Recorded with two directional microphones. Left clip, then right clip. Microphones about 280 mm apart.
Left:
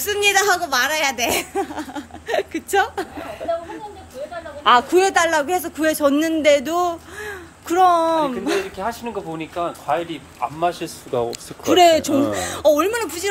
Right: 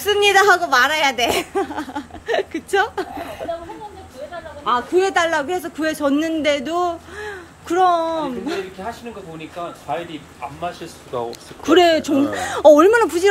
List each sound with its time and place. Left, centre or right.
0.0 s speech: centre
4.6 s a man's voice: centre
11.1 s speech: left
11.6 s speech: centre